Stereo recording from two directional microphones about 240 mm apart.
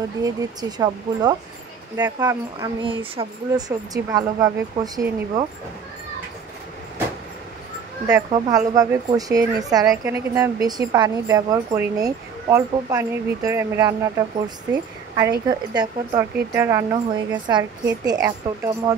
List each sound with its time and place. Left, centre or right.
0.2 s a woman's voice: centre
8.1 s a woman's voice: centre